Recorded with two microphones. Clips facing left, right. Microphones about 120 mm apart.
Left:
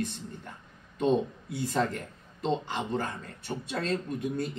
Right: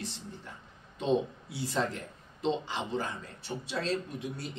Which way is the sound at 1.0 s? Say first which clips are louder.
Left 3 dB; 50° left (ahead or behind).